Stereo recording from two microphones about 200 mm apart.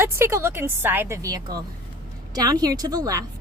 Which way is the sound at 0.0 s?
15° right (ahead or behind).